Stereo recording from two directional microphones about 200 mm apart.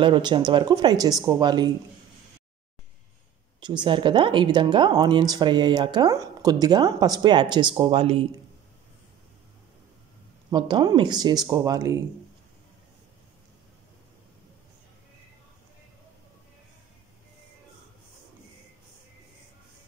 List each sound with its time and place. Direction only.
0.0 s speech: 25° right (ahead or behind)
3.6 s speech: 25° right (ahead or behind)
10.5 s speech: 20° right (ahead or behind)